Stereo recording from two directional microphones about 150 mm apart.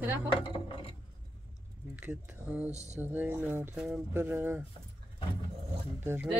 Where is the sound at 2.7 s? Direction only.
50° right (ahead or behind).